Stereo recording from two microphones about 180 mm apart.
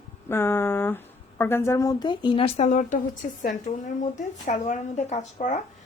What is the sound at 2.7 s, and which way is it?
Speech, 45° left (ahead or behind).